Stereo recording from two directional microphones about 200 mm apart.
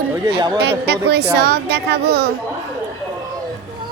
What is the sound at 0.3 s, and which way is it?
Speech, 20° right (ahead or behind).